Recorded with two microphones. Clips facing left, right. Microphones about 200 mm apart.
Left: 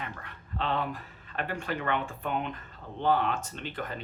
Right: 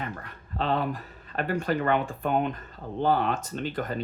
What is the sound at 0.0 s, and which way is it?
Speech, 40° right (ahead or behind).